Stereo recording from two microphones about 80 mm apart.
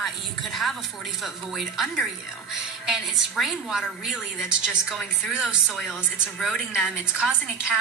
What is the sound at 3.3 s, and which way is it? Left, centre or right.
A woman's voice, centre.